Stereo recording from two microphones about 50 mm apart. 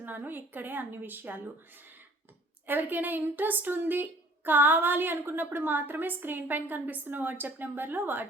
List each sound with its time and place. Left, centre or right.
0.0 s a woman's voice: right